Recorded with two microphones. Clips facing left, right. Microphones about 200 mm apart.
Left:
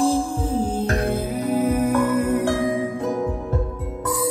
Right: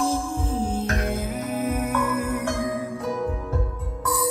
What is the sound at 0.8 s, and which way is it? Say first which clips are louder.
Music: left 4 dB; 35° left (ahead or behind).